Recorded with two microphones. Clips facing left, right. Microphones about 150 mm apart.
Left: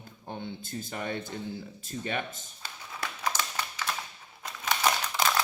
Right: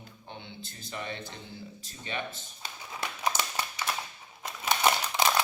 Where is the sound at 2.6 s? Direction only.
15° right (ahead or behind).